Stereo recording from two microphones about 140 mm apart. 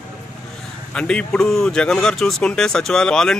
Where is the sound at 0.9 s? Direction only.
5° left (ahead or behind).